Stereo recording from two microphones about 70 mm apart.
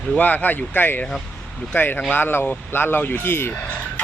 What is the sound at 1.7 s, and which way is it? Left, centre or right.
Speech, left.